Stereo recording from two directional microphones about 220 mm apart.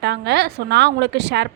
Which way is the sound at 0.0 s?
50° right (ahead or behind).